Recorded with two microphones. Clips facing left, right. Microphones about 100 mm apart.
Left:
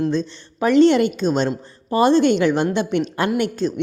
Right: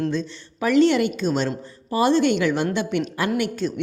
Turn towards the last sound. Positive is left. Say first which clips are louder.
# left 3 dB
turn(degrees=25)  # may be behind; listen again after turning